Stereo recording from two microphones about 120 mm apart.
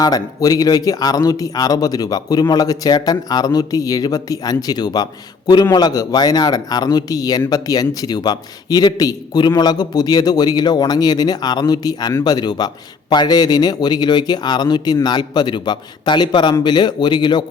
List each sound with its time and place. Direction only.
0.0 s speech: 30° left (ahead or behind)